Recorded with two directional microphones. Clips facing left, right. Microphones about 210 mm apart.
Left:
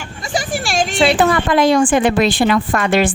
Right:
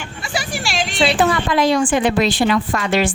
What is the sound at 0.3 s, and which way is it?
A woman's voice, 50° left (ahead or behind).